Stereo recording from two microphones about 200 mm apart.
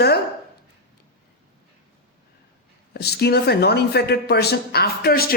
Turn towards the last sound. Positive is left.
turn(degrees=50)  # may be behind; listen again after turning